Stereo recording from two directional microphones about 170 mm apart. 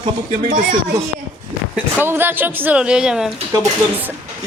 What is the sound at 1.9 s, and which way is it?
A woman's voice, 10° right (ahead or behind).